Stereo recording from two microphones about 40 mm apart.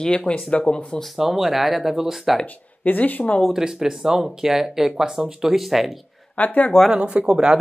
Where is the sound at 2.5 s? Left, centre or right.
Left.